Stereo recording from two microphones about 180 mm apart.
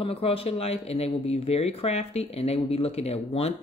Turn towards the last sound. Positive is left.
turn(degrees=35)  # may be behind; listen again after turning